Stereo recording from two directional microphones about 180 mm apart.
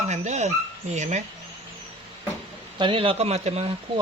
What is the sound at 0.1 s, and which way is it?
Dog, 40° right (ahead or behind).